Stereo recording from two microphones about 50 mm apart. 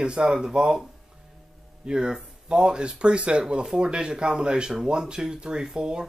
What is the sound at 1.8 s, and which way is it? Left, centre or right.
Speech, centre.